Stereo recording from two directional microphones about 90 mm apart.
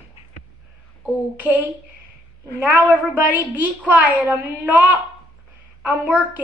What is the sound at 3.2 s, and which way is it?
A woman's voice, 20° right (ahead or behind).